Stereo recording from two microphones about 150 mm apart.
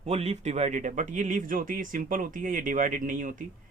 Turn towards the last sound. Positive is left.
turn(degrees=-60)  # may be behind; listen again after turning